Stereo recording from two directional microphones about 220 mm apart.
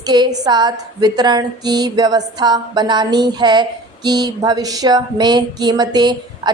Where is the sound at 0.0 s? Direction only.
20° right (ahead or behind).